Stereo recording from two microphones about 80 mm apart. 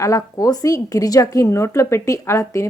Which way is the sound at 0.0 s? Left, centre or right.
Left.